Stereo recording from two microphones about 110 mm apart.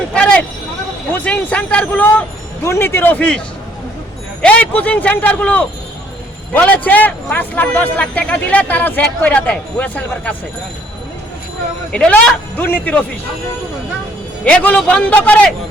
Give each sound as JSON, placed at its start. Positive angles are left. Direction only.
{"t": 0.1, "sound": "a sound", "side_deg": 10}
{"t": 1.1, "sound": "a man's voice", "side_deg": 15}
{"t": 4.4, "sound": "a man's voice", "side_deg": 10}
{"t": 11.9, "sound": "a man's voice", "side_deg": 10}
{"t": 14.4, "sound": "a man's voice", "side_deg": 15}